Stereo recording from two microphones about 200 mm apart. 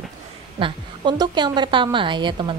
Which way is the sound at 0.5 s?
25° right (ahead or behind).